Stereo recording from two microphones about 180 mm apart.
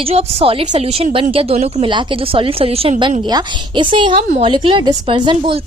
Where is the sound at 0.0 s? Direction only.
35° right (ahead or behind).